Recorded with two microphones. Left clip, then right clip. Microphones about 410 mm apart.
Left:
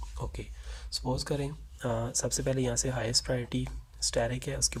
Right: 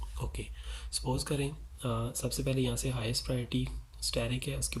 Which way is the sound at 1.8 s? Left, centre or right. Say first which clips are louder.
Left 5 dB; centre.